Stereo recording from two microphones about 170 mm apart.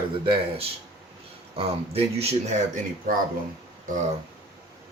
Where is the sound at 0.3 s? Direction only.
35° right (ahead or behind).